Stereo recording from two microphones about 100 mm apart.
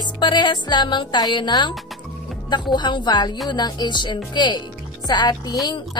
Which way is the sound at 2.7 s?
50° left (ahead or behind).